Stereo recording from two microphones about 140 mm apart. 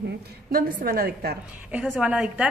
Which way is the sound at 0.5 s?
85° right.